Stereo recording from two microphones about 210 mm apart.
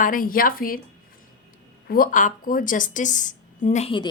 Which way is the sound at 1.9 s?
40° left (ahead or behind).